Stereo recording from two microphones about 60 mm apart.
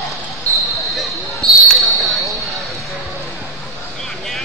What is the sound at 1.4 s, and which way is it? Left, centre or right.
Basketball bounce, right.